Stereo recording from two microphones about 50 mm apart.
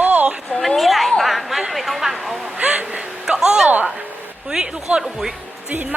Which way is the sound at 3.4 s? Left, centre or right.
Centre.